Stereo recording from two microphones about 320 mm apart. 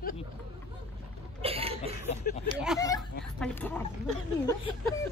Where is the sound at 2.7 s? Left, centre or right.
Centre.